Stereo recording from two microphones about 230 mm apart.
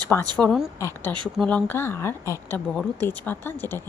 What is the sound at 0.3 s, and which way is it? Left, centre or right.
Speech, centre.